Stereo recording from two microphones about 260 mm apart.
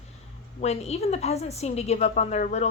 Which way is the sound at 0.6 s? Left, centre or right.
Left.